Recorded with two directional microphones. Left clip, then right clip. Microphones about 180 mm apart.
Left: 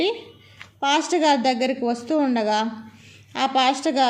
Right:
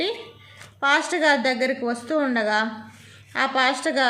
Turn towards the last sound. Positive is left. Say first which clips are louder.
# left 1 dB
turn(degrees=10)  # may be behind; listen again after turning